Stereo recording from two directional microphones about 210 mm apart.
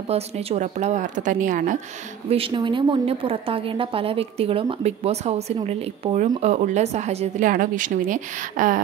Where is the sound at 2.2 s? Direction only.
25° right (ahead or behind).